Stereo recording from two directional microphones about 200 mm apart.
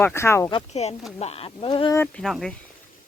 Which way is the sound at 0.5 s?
30° left (ahead or behind).